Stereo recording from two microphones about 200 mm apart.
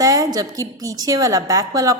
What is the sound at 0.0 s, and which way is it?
A woman's voice, 15° right (ahead or behind).